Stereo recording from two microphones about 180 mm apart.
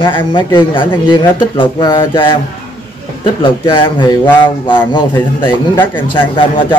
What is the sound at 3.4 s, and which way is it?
Speech, 25° left (ahead or behind).